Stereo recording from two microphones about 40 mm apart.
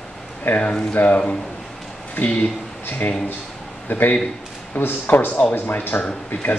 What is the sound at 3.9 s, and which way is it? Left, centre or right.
Speech, left.